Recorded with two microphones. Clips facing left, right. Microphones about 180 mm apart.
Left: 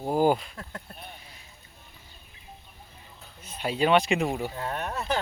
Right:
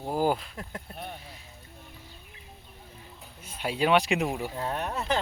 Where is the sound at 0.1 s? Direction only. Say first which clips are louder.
Left 4 dB; centre (ahead or behind).